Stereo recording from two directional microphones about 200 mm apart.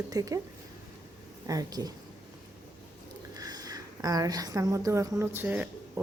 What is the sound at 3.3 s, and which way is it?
A woman's voice, 20° right (ahead or behind).